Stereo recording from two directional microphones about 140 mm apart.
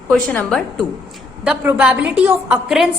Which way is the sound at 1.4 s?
10° right (ahead or behind).